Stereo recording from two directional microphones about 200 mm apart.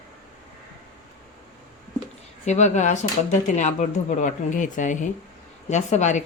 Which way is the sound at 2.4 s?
35° left (ahead or behind).